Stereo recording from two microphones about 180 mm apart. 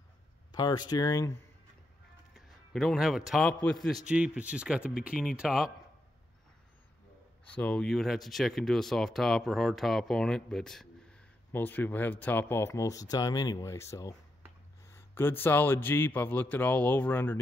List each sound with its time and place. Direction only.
0.5 s speech: 20° left (ahead or behind)
2.3 s speech: centre (ahead or behind)
7.5 s a man's voice: 5° left (ahead or behind)